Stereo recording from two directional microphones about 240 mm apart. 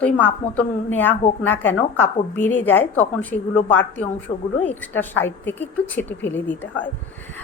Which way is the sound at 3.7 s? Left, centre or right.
Centre.